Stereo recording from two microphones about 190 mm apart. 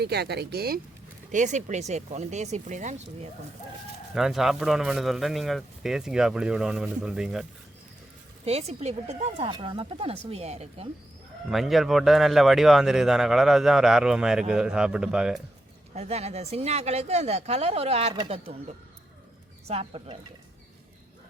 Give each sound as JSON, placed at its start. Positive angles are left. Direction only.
{"t": 0.0, "sound": "speech", "side_deg": -60}
{"t": 1.3, "sound": "speech", "side_deg": -40}
{"t": 4.1, "sound": "speech", "side_deg": 0}
{"t": 8.4, "sound": "speech", "side_deg": -35}
{"t": 11.4, "sound": "speech", "side_deg": 0}
{"t": 16.0, "sound": "speech", "side_deg": -35}
{"t": 19.6, "sound": "speech", "side_deg": -30}